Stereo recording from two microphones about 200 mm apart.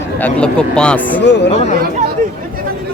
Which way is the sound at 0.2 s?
5° left (ahead or behind).